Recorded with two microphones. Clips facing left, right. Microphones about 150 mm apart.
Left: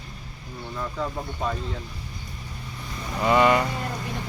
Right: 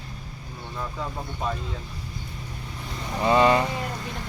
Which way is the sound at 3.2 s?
25° right (ahead or behind).